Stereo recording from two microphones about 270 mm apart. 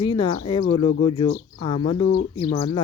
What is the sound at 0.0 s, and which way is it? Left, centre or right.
Speech, centre.